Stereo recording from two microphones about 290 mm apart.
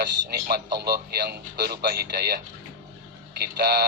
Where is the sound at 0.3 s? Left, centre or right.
Right.